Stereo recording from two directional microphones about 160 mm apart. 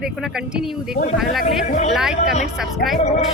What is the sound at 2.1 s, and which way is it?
Speech, 45° left (ahead or behind).